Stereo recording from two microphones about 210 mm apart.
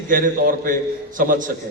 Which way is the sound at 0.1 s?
40° right (ahead or behind).